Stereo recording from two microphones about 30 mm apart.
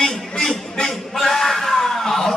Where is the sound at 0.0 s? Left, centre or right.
Centre.